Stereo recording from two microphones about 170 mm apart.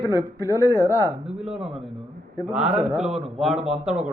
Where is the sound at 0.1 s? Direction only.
20° right (ahead or behind).